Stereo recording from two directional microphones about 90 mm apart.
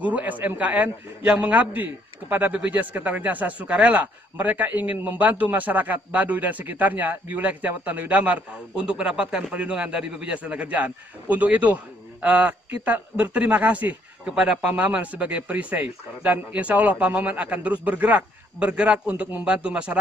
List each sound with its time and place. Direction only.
0.0 s a man's voice: 15° right (ahead or behind)